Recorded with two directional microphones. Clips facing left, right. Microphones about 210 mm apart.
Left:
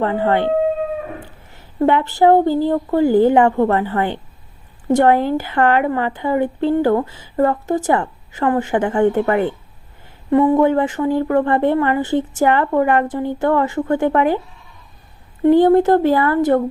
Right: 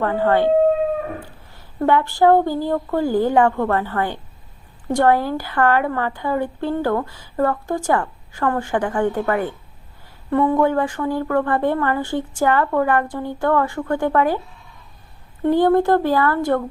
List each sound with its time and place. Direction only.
0.0 s a woman's voice: 20° left (ahead or behind)
1.5 s a woman's voice: 20° left (ahead or behind)
15.4 s a woman's voice: 20° left (ahead or behind)